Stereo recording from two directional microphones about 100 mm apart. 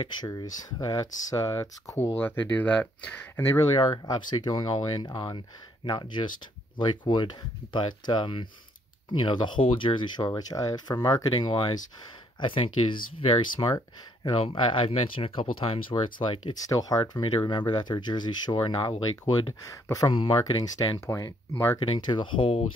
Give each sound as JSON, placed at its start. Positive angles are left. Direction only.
{"t": 0.0, "sound": "speech", "side_deg": 45}
{"t": 2.1, "sound": "speech", "side_deg": 15}
{"t": 3.3, "sound": "speech", "side_deg": 30}
{"t": 3.7, "sound": "speech", "side_deg": 50}
{"t": 11.3, "sound": "speech", "side_deg": 50}
{"t": 12.4, "sound": "speech", "side_deg": 65}
{"t": 14.3, "sound": "speech", "side_deg": 65}
{"t": 16.6, "sound": "speech", "side_deg": 35}
{"t": 17.2, "sound": "speech", "side_deg": 55}
{"t": 19.6, "sound": "speech", "side_deg": 35}
{"t": 20.1, "sound": "speech", "side_deg": 55}
{"t": 20.5, "sound": "speech", "side_deg": 40}
{"t": 21.7, "sound": "speech", "side_deg": 50}